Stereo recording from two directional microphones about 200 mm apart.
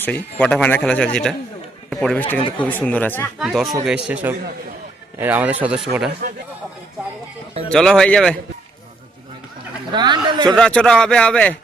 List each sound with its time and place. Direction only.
0.0 s a man's voice: 10° left (ahead or behind)
7.7 s a man's voice: 5° left (ahead or behind)
9.9 s speech: 20° right (ahead or behind)
10.5 s a man's voice: 5° left (ahead or behind)